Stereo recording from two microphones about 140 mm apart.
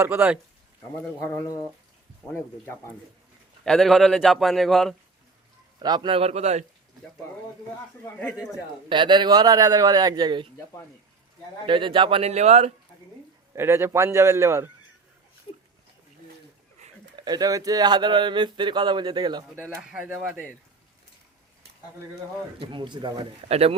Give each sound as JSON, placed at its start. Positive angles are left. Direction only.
{"t": 0.0, "sound": "speech", "side_deg": -15}
{"t": 1.2, "sound": "speech", "side_deg": 20}
{"t": 2.2, "sound": "a man's voice", "side_deg": 5}
{"t": 3.6, "sound": "a man's voice", "side_deg": 5}
{"t": 5.8, "sound": "a man's voice", "side_deg": -30}
{"t": 8.0, "sound": "speech", "side_deg": 10}
{"t": 8.9, "sound": "a man's voice", "side_deg": -35}
{"t": 11.6, "sound": "speech", "side_deg": -35}
{"t": 13.6, "sound": "a man's voice", "side_deg": -20}
{"t": 17.2, "sound": "speech", "side_deg": -30}
{"t": 19.8, "sound": "speech", "side_deg": -5}
{"t": 22.6, "sound": "speech", "side_deg": -35}